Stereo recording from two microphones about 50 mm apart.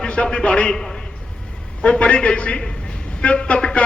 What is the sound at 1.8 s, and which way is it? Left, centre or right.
A man's voice, left.